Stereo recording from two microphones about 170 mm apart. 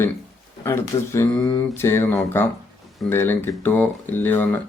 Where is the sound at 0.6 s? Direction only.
15° left (ahead or behind).